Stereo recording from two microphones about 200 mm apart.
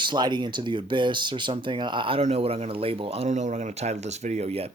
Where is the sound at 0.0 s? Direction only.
20° right (ahead or behind).